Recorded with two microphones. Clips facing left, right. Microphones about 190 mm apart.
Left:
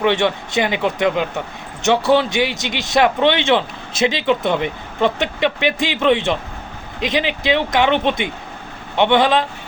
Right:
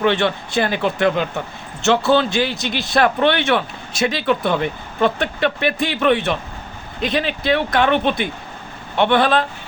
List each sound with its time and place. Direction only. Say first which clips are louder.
0.0 s a man's voice: left 1 dB; 20° left (ahead or behind)